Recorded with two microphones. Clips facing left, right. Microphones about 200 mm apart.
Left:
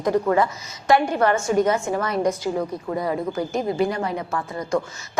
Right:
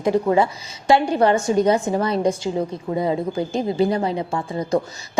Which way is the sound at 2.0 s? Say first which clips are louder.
Right 2 dB; 30° right (ahead or behind).